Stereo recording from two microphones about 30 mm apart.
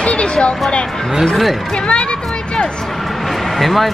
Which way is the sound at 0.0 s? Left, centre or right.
Left.